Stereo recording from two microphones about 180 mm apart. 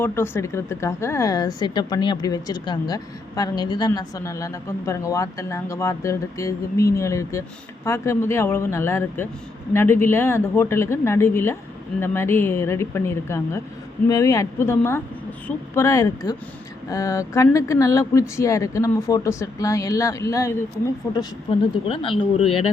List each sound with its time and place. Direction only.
0.0 s speech: 10° left (ahead or behind)
21.5 s speech: 30° left (ahead or behind)